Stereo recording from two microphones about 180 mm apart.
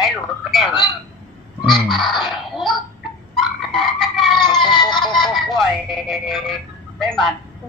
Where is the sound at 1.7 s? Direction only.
Centre (ahead or behind).